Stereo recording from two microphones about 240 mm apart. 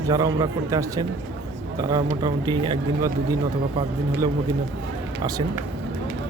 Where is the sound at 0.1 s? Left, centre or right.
Centre.